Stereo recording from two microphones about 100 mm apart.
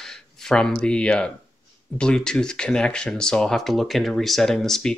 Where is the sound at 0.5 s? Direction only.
5° left (ahead or behind).